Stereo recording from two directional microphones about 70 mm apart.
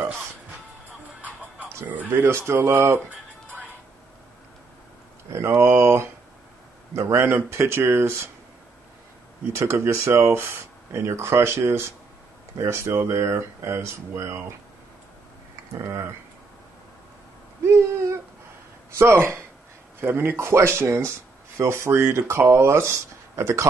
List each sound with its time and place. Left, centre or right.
1.9 s speech: right
5.3 s speech: right
9.6 s speech: right
15.8 s speech: right
17.6 s a sound: right
18.9 s speech: right